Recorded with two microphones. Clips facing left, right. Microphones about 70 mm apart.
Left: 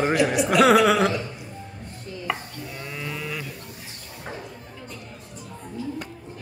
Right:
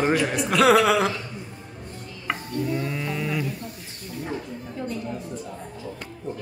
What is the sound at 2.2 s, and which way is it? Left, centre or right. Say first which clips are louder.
Chopping: right 5 dB; centre.